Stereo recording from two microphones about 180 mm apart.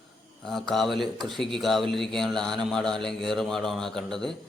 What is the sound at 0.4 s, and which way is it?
A man's voice, centre (ahead or behind).